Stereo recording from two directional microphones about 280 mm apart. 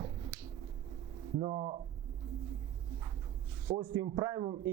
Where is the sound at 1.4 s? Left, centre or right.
Centre.